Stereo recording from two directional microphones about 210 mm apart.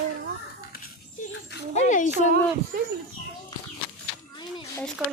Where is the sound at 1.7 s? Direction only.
35° left (ahead or behind).